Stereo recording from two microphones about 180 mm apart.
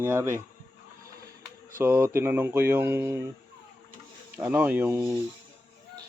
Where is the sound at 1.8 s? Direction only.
10° right (ahead or behind).